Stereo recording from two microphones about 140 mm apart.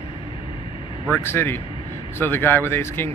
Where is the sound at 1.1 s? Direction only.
15° left (ahead or behind).